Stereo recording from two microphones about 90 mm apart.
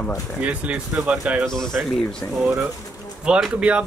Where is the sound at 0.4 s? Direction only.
15° right (ahead or behind).